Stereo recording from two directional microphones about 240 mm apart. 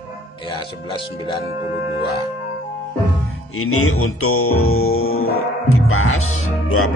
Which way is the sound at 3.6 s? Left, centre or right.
Left.